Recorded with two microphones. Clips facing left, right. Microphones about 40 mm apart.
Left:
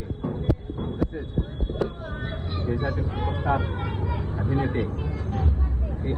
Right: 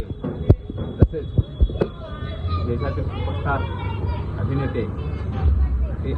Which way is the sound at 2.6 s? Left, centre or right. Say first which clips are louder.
Right 1 dB; right.